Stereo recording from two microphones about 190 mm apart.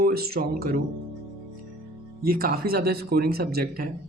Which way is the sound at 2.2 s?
50° right (ahead or behind).